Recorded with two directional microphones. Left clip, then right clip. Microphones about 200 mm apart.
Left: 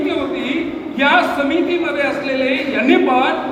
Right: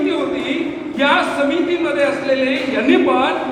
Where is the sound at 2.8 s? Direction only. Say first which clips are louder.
Left 1 dB; 45° left (ahead or behind).